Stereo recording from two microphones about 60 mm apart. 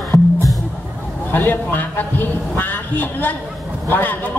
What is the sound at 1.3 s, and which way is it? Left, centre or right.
A man's voice, left.